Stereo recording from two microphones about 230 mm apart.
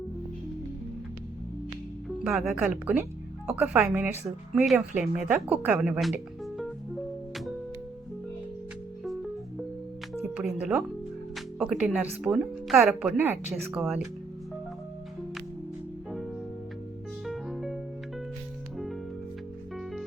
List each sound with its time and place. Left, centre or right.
2.2 s a woman's voice: centre
10.2 s speech: centre
11.3 s music: centre
12.2 s a woman's voice: centre
17.2 s music: centre
19.7 s music: centre